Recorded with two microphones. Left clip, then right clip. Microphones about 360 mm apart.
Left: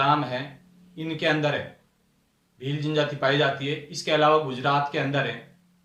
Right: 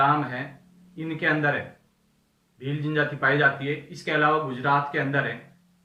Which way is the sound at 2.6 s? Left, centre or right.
Centre.